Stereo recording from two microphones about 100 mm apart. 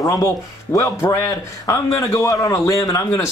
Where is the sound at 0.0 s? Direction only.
30° left (ahead or behind).